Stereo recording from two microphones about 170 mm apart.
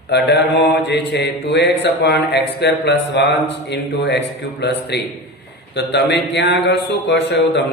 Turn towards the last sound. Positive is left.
turn(degrees=90)